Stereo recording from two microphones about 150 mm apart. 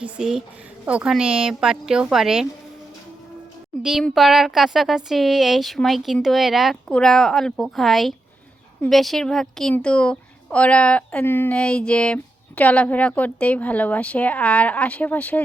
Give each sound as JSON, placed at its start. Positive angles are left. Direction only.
{"t": 0.0, "sound": "speech", "side_deg": -5}
{"t": 4.0, "sound": "a woman's voice", "side_deg": 0}